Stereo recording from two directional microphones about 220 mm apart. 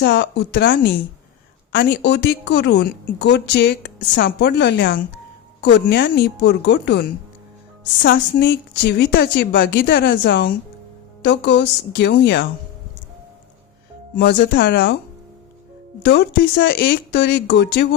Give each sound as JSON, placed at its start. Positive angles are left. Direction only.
{"t": 0.0, "sound": "a woman's voice", "side_deg": 50}
{"t": 14.2, "sound": "a woman's voice", "side_deg": 50}
{"t": 16.0, "sound": "a woman's voice", "side_deg": 50}